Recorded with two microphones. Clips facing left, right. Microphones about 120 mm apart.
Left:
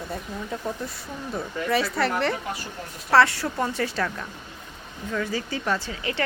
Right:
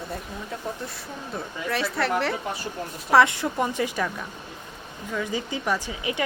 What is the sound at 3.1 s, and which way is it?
Speech, 20° right (ahead or behind).